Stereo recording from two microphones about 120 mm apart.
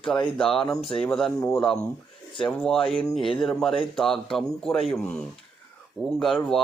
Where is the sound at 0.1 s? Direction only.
5° left (ahead or behind).